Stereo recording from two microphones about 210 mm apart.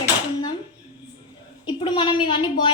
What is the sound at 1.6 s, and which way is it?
A woman's voice, 20° left (ahead or behind).